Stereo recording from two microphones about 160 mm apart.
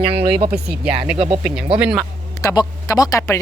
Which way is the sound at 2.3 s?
20° left (ahead or behind).